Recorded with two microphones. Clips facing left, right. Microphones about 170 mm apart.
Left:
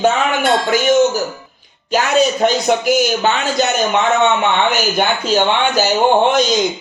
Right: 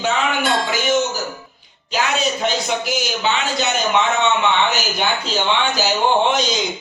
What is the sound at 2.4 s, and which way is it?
Speech, 45° left (ahead or behind).